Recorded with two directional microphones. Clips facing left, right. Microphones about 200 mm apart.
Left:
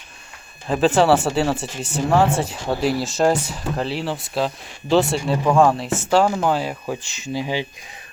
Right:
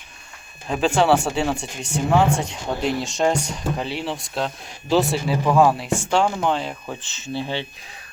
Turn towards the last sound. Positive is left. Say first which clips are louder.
# left 3 dB
turn(degrees=10)  # may be behind; listen again after turning